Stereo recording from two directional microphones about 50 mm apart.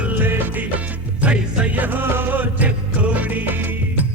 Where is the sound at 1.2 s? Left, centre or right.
Right.